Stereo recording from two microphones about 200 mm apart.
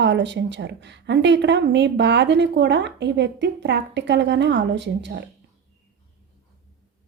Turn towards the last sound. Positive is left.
turn(degrees=-60)  # may be behind; listen again after turning